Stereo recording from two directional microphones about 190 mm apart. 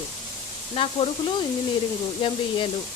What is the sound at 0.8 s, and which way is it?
Speech, 30° left (ahead or behind).